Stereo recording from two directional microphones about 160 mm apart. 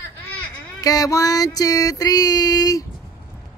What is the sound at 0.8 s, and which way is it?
Female singing, 20° left (ahead or behind).